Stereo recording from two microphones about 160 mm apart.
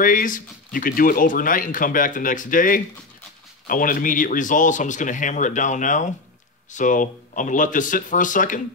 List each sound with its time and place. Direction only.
0.0 s speech: 60° left (ahead or behind)